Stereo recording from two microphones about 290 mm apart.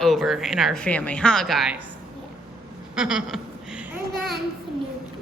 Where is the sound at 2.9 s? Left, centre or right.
Centre.